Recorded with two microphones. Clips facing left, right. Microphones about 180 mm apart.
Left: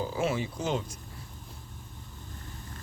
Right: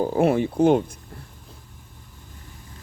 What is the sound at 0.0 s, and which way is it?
Speech, 55° right (ahead or behind).